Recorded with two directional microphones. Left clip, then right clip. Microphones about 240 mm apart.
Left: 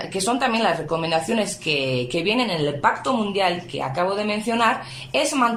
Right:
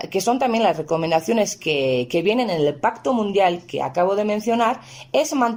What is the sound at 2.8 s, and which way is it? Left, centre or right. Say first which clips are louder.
Speech: even; right.